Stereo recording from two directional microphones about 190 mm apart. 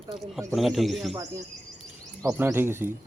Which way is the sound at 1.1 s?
15° right (ahead or behind).